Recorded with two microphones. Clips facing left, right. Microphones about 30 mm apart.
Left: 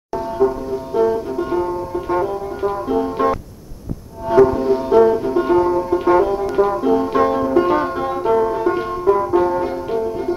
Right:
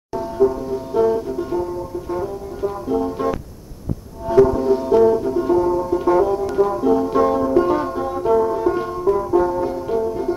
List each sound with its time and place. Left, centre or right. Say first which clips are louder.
0.1 s music: even; centre
1.5 s music: left 3 dB; left
5.3 s music: left 2 dB; left